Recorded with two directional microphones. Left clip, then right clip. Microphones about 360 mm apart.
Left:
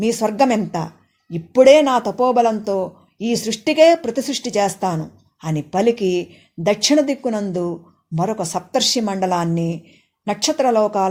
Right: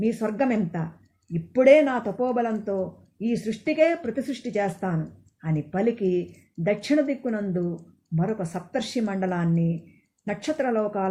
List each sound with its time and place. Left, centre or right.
0.2 s speech: left